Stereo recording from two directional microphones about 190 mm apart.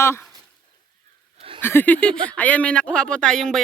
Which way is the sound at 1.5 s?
10° left (ahead or behind).